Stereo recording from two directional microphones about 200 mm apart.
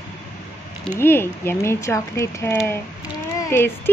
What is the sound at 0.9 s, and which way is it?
A child's voice, 10° left (ahead or behind).